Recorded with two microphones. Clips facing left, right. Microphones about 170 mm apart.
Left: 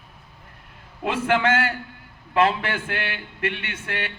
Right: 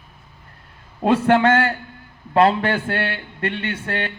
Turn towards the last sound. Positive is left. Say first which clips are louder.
# right 6 dB
turn(degrees=-35)  # may be behind; listen again after turning